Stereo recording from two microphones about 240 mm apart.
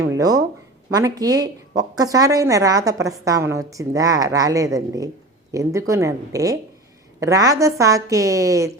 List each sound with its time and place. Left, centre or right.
0.1 s a woman's voice: centre